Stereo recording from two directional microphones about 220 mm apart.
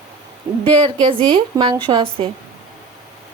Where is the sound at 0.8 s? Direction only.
20° right (ahead or behind).